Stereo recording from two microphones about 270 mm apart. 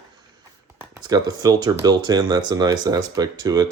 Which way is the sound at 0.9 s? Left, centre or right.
Centre.